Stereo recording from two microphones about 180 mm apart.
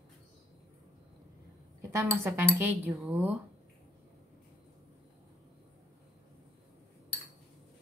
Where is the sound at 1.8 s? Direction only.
15° right (ahead or behind).